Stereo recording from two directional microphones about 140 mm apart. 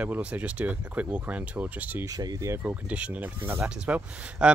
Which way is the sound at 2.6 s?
10° right (ahead or behind).